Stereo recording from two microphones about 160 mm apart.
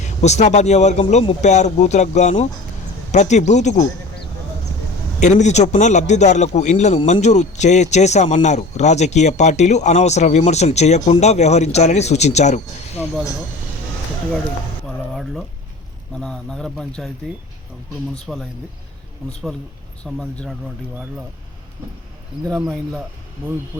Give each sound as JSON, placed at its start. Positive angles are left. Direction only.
{"t": 0.0, "sound": "a man's voice", "side_deg": 45}
{"t": 5.2, "sound": "a man's voice", "side_deg": 45}
{"t": 15.1, "sound": "speech", "side_deg": 0}
{"t": 18.3, "sound": "speech", "side_deg": 0}
{"t": 20.1, "sound": "speech", "side_deg": 5}
{"t": 22.5, "sound": "speech", "side_deg": 0}